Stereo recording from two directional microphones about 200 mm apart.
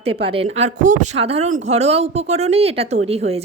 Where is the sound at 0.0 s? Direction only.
30° right (ahead or behind).